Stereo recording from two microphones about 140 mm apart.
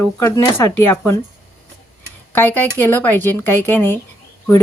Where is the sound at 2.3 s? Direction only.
15° left (ahead or behind).